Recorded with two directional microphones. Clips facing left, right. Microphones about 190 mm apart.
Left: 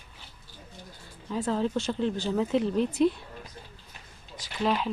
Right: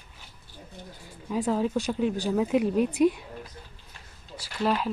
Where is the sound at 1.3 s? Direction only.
10° right (ahead or behind).